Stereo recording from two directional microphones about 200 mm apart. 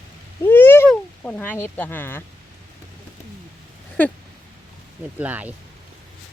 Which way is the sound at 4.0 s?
10° left (ahead or behind).